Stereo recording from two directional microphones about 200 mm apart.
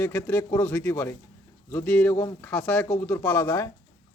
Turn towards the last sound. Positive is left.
turn(degrees=10)  # may be behind; listen again after turning